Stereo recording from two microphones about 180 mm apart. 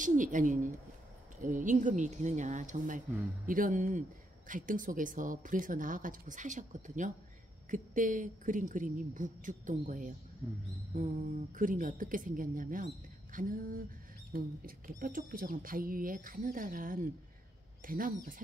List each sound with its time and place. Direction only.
0.0 s a woman's voice: 45° right (ahead or behind)
14.9 s a woman's voice: 50° right (ahead or behind)